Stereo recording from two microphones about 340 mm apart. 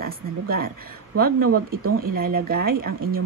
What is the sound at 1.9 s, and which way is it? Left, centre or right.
Speech, right.